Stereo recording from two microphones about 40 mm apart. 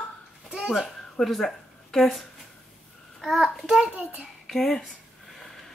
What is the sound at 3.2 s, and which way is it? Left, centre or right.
Speech, centre.